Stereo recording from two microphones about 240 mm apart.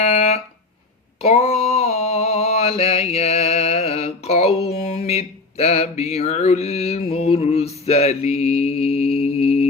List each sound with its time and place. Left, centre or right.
0.0 s fire alarm: left
1.2 s mantra: left